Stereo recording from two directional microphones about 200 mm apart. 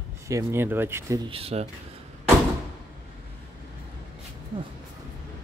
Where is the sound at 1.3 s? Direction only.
30° right (ahead or behind).